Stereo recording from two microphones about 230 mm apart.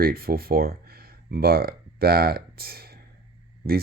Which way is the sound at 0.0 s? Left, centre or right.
Right.